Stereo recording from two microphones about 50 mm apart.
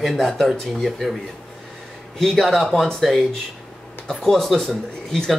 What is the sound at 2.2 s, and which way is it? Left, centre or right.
Speech, centre.